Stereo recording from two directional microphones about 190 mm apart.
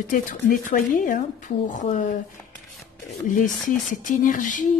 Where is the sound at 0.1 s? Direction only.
45° left (ahead or behind).